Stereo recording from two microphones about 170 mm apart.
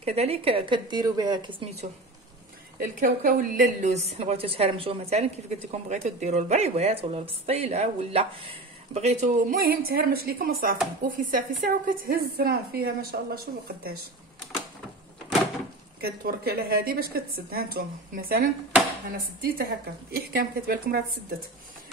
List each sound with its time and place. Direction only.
0.0 s a woman's voice: 40° right (ahead or behind)
2.8 s a woman's voice: 55° right (ahead or behind)
9.6 s a woman's voice: 60° right (ahead or behind)
16.0 s a woman's voice: 65° right (ahead or behind)